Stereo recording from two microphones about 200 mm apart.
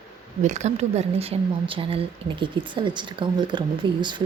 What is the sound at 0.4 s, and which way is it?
Speech, 35° right (ahead or behind).